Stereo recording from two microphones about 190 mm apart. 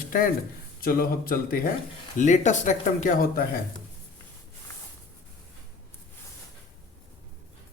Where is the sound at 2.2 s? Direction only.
40° left (ahead or behind).